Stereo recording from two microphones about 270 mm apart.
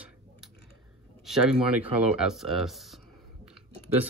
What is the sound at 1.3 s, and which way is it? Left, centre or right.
Speech, centre.